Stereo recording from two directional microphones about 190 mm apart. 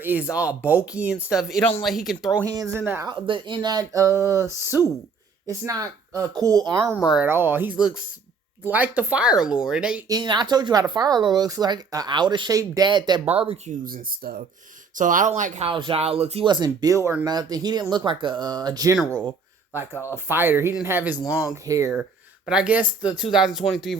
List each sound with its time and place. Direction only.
0.0 s speech: 10° right (ahead or behind)
2.4 s speech: 20° right (ahead or behind)
3.1 s speech: 25° right (ahead or behind)
7.1 s speech: 10° right (ahead or behind)
10.1 s speech: 20° right (ahead or behind)
13.8 s speech: 50° right (ahead or behind); by 18.9 s 20° right (ahead or behind)
20.1 s speech: 10° right (ahead or behind)
21.2 s speech: 20° left (ahead or behind)
21.5 s speech: 15° right (ahead or behind)
22.4 s speech: 5° right (ahead or behind)